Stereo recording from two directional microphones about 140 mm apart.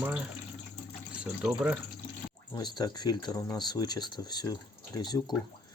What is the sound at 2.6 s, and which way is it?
Speech, 30° left (ahead or behind).